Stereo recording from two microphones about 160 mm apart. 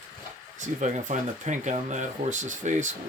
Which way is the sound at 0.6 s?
50° right (ahead or behind).